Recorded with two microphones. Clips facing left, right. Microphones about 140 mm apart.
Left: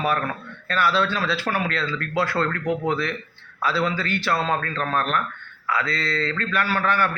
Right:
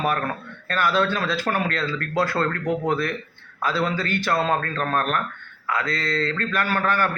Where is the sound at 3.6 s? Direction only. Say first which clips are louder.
Even; 45° right (ahead or behind).